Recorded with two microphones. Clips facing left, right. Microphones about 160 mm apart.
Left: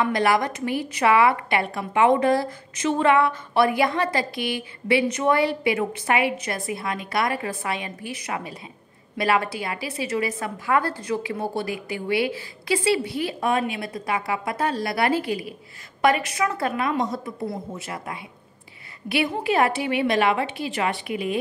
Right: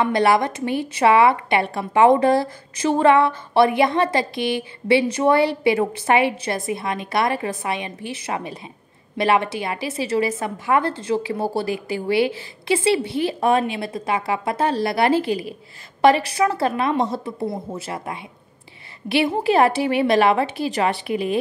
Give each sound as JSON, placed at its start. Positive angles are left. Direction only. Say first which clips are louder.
{"t": 0.0, "sound": "a woman's voice", "louder": "right 3 dB", "side_deg": -25}